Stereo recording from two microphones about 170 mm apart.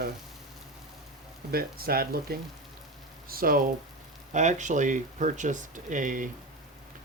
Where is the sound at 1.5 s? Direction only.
60° right (ahead or behind).